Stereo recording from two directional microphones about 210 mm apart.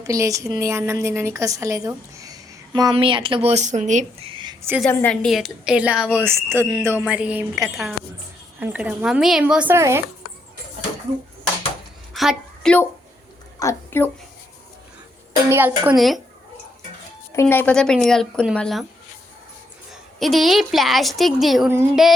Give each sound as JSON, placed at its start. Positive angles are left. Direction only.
{"t": 0.0, "sound": "a woman's voice", "side_deg": -15}
{"t": 4.8, "sound": "a woman's voice", "side_deg": 5}
{"t": 12.1, "sound": "a sound", "side_deg": 0}
{"t": 13.6, "sound": "a woman's voice", "side_deg": 10}
{"t": 15.4, "sound": "a woman's voice", "side_deg": -10}
{"t": 17.3, "sound": "a woman's voice", "side_deg": 10}
{"t": 19.9, "sound": "a woman's voice", "side_deg": 0}